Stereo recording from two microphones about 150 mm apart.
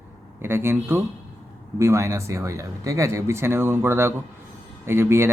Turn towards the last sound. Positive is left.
turn(degrees=-15)  # may be behind; listen again after turning